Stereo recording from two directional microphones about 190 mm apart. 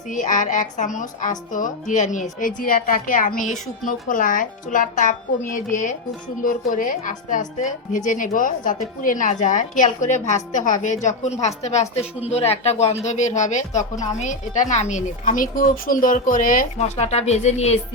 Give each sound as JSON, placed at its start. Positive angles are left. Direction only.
{"t": 0.1, "sound": "a woman's voice", "side_deg": 40}